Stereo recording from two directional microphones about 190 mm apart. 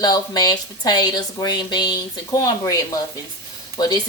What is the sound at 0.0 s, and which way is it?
Speech, 20° left (ahead or behind).